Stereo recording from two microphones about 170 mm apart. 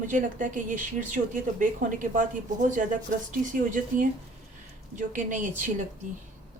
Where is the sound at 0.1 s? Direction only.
50° right (ahead or behind).